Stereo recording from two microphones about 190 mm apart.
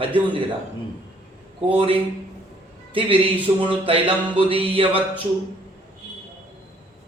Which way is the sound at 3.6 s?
30° right (ahead or behind).